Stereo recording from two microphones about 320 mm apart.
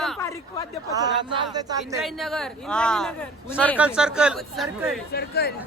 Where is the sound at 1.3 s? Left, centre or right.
Centre.